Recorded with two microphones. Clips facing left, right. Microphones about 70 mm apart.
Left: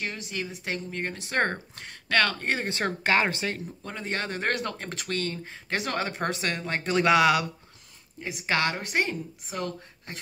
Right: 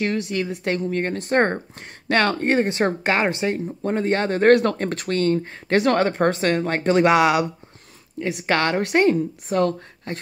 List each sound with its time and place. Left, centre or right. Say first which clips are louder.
0.0 s speech: right 10 dB; right
2.6 s speech: right 8 dB; right
4.5 s speech: right 17 dB; right
6.1 s speech: right 10 dB; right
7.0 s speech: right 3 dB; right
8.2 s speech: right 6 dB; right